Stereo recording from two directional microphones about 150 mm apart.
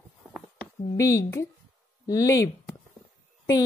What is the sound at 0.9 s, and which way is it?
Speech, 20° left (ahead or behind).